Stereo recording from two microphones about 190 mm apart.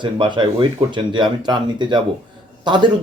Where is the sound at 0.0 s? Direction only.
25° right (ahead or behind).